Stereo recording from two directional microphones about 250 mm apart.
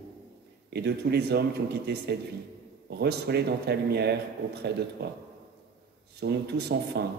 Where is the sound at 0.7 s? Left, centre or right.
Right.